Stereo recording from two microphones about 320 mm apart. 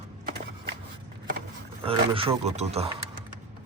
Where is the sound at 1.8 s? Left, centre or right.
Centre.